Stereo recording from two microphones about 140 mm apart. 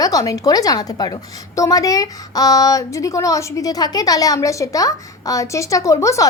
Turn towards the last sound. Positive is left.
turn(degrees=20)  # may be behind; listen again after turning